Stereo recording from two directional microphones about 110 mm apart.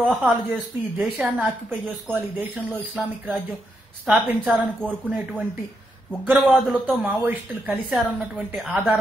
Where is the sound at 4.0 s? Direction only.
10° right (ahead or behind).